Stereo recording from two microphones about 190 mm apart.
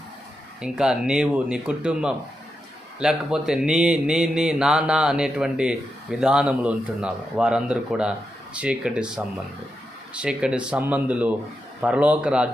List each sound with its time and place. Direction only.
0.6 s speech: 5° right (ahead or behind)